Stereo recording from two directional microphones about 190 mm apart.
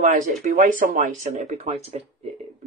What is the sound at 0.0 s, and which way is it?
Speech, 40° right (ahead or behind).